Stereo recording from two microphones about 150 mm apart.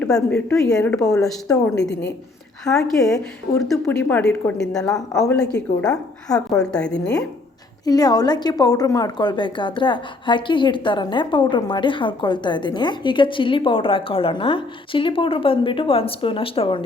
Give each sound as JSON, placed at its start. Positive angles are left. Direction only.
{"t": 0.0, "sound": "a woman's voice", "side_deg": 5}
{"t": 7.9, "sound": "a woman's voice", "side_deg": 25}